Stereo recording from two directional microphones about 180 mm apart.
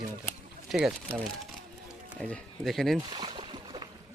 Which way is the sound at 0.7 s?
Centre (ahead or behind).